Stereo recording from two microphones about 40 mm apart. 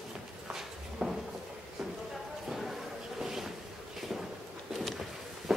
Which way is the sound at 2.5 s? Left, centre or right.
Centre.